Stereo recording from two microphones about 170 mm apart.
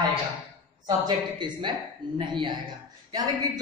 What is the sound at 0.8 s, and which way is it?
A man's voice, 25° right (ahead or behind).